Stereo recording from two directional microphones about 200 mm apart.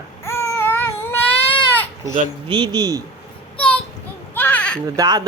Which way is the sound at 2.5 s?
20° right (ahead or behind).